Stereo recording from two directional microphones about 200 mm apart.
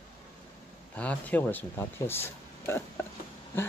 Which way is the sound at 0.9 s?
5° left (ahead or behind).